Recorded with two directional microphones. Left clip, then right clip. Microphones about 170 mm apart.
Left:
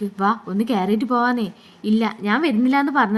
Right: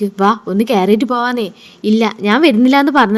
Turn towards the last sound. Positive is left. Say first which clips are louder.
# right 7 dB
turn(degrees=-35)  # may be behind; listen again after turning